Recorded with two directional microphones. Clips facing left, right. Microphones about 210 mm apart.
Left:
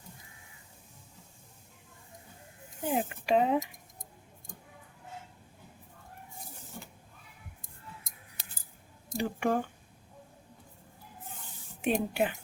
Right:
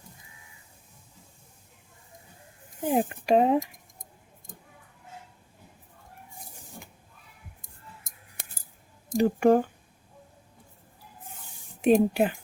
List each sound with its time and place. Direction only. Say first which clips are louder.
2.9 s speech: right 5 dB; 45° right (ahead or behind)
9.1 s speech: right 9 dB; 40° right (ahead or behind)
11.8 s speech: right 8 dB; 40° right (ahead or behind)